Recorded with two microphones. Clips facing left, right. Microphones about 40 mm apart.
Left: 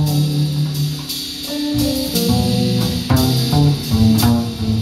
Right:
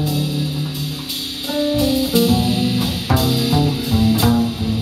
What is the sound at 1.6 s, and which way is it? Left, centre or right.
Music, right.